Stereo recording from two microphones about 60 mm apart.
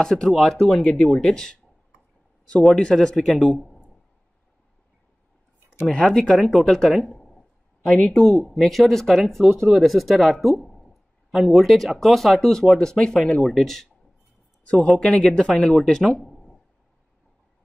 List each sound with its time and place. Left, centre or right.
0.0 s speech: centre
2.7 s a man's voice: centre
5.9 s speech: centre
7.0 s a sound: centre
8.4 s speech: centre
10.6 s a sound: centre
10.9 s speech: centre
14.6 s a sound: centre
14.9 s speech: centre